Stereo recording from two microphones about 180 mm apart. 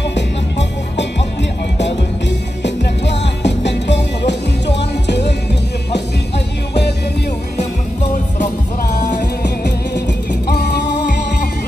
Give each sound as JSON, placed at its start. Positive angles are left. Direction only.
{"t": 0.1, "sound": "music", "side_deg": 75}
{"t": 8.9, "sound": "music", "side_deg": 40}
{"t": 10.5, "sound": "music", "side_deg": 65}